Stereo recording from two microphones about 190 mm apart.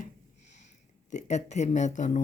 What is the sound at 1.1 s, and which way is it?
Speech, 35° left (ahead or behind).